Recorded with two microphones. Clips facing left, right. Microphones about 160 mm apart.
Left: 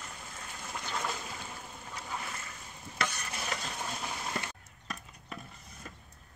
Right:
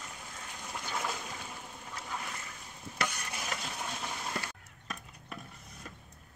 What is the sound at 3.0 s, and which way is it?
Stir, 10° right (ahead or behind).